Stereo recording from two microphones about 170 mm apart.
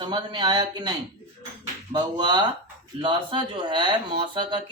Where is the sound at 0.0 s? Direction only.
25° right (ahead or behind).